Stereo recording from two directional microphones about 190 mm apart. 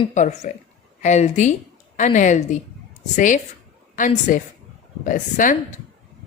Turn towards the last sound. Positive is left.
turn(degrees=40)  # may be behind; listen again after turning